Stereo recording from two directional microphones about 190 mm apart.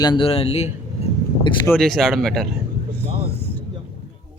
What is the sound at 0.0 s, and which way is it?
Speech, 25° left (ahead or behind).